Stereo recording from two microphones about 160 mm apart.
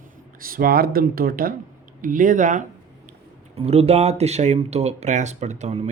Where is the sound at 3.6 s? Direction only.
40° right (ahead or behind).